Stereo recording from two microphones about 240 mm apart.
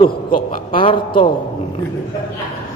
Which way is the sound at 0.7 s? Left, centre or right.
Left.